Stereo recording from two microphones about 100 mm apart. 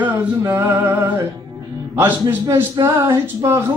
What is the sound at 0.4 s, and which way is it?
Speech, 20° right (ahead or behind).